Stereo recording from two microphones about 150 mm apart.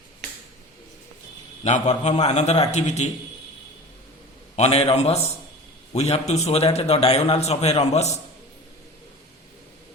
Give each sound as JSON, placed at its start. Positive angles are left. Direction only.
{"t": 1.6, "sound": "a man's voice", "side_deg": 50}
{"t": 4.5, "sound": "a man's voice", "side_deg": 45}